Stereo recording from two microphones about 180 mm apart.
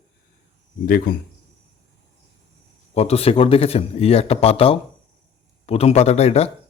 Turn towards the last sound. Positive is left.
turn(degrees=35)  # may be behind; listen again after turning